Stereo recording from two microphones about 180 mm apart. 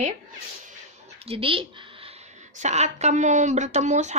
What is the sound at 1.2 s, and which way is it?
A woman's voice, 30° right (ahead or behind).